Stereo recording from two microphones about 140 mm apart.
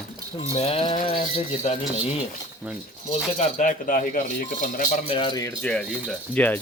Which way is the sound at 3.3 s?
60° left (ahead or behind).